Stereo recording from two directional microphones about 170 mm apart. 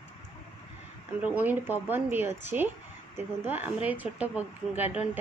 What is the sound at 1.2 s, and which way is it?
A woman's voice, 10° right (ahead or behind).